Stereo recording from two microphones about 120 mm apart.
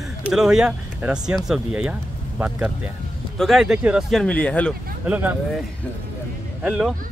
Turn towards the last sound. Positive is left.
turn(degrees=0)  # may be behind; listen again after turning